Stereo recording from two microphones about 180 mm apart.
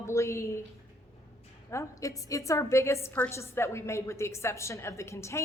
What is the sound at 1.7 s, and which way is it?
A woman's voice, 20° left (ahead or behind).